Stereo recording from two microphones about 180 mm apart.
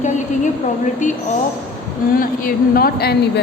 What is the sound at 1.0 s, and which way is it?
Speech, 45° left (ahead or behind).